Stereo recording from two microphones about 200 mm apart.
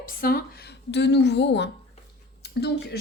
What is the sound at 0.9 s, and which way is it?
A woman's voice, 60° left (ahead or behind).